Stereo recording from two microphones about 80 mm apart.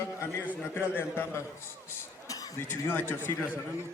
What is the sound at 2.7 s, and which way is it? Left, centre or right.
Speech, left.